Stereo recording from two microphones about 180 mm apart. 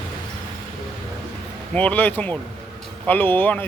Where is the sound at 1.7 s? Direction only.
10° left (ahead or behind).